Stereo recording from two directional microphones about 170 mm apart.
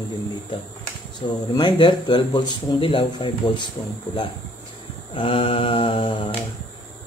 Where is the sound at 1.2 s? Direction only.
25° left (ahead or behind).